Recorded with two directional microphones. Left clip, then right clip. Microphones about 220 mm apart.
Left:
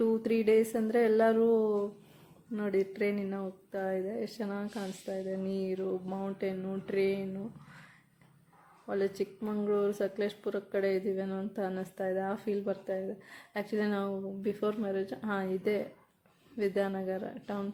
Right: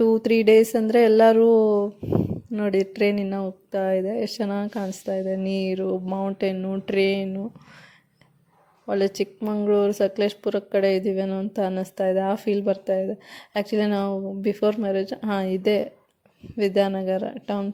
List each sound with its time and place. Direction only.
0.0 s speech: 30° right (ahead or behind)
8.9 s speech: 35° right (ahead or behind)